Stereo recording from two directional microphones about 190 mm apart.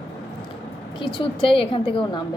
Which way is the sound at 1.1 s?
25° left (ahead or behind).